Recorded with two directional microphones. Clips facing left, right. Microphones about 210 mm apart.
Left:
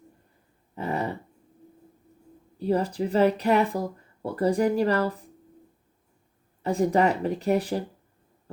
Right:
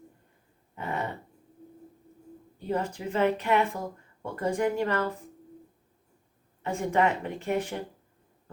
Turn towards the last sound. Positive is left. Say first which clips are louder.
# left 5 dB
turn(degrees=35)  # may be behind; listen again after turning